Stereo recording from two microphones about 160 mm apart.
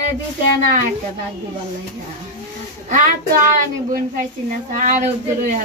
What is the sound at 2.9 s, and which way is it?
Speech, 50° right (ahead or behind).